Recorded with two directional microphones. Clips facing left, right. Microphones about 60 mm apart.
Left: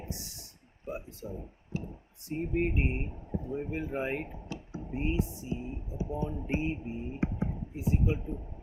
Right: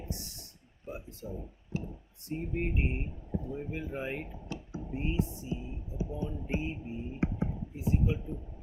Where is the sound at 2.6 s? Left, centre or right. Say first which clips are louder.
Left 4 dB; left.